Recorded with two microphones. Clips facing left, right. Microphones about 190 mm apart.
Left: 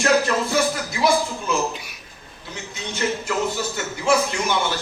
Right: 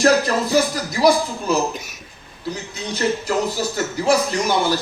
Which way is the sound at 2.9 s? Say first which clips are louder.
Right 4 dB; 35° right (ahead or behind).